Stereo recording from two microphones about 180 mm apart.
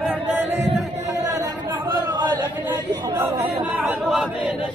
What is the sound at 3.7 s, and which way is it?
Speech, 5° right (ahead or behind).